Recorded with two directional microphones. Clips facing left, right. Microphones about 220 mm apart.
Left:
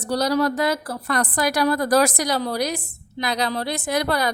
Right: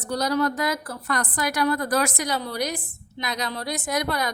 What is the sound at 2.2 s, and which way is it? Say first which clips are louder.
Speech: left 4 dB; 90° left.